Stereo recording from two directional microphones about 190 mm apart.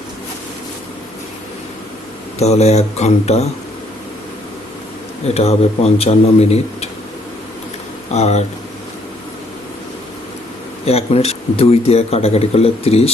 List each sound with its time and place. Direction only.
2.4 s a man's voice: 35° left (ahead or behind)
5.3 s a man's voice: 35° left (ahead or behind)
8.1 s a man's voice: 35° left (ahead or behind)
10.8 s a man's voice: 30° left (ahead or behind)